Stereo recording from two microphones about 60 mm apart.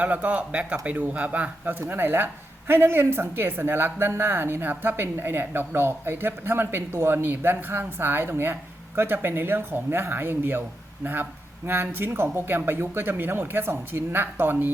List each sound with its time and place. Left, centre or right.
0.0 s speech: right
1.8 s a woman's voice: right